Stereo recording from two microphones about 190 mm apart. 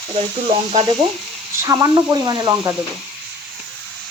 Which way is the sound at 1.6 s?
15° right (ahead or behind).